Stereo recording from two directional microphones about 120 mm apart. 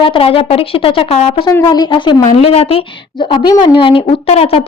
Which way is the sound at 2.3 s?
60° left (ahead or behind).